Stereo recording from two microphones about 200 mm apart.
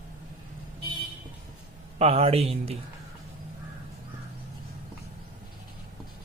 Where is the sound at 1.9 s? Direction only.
30° right (ahead or behind).